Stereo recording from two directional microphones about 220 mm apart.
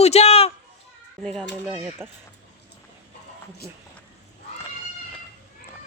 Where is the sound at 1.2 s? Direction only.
Centre (ahead or behind).